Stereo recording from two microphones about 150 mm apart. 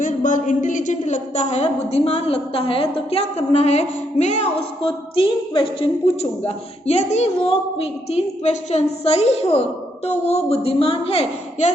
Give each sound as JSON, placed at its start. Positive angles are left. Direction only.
{"t": 0.0, "sound": "a woman's voice", "side_deg": 60}
{"t": 4.8, "sound": "a woman's voice", "side_deg": 35}
{"t": 6.8, "sound": "a woman's voice", "side_deg": 45}